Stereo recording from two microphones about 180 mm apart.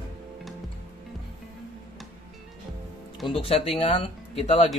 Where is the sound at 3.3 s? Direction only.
30° left (ahead or behind).